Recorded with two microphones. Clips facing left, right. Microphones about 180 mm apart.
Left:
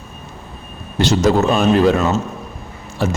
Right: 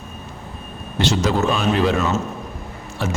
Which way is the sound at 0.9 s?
45° left (ahead or behind).